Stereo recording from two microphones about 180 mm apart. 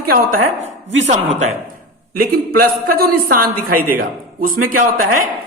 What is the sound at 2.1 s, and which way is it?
A man's voice, 55° right (ahead or behind).